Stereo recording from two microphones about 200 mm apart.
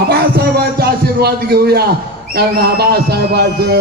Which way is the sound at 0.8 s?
50° right (ahead or behind).